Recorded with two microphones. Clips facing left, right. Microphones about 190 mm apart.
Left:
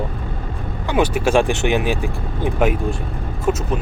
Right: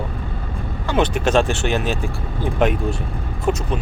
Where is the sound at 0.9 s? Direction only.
10° left (ahead or behind).